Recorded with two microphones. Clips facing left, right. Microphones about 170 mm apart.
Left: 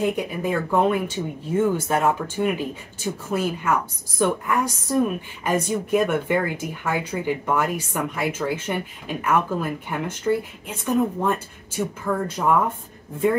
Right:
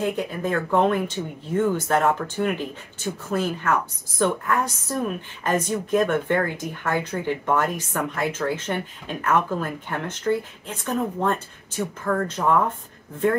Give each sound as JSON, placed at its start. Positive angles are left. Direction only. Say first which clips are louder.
{"t": 0.0, "sound": "a woman's voice", "louder": "left 1 dB", "side_deg": 10}